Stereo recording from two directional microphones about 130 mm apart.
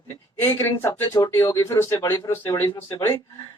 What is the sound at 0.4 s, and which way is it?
Speech, 20° left (ahead or behind).